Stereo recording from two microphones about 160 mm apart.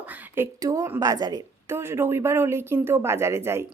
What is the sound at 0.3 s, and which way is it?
Speech, 20° right (ahead or behind).